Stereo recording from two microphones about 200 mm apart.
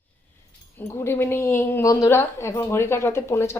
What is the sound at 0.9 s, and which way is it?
A woman's voice, 10° left (ahead or behind).